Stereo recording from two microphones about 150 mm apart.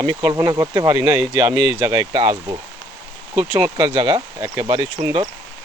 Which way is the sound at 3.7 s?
35° right (ahead or behind).